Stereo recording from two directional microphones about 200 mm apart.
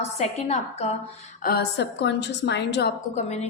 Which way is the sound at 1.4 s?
50° left (ahead or behind).